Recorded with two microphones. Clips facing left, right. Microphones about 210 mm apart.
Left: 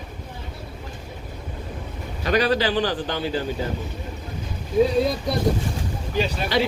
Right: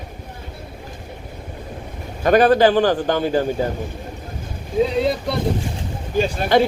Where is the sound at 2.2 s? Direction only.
50° right (ahead or behind).